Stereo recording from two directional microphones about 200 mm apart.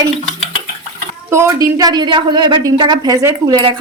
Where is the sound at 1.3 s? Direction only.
15° right (ahead or behind).